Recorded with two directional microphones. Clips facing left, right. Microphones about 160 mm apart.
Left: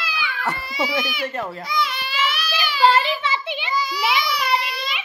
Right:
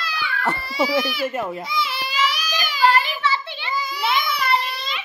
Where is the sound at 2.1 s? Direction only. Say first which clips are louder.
Right 2 dB; 35° right (ahead or behind).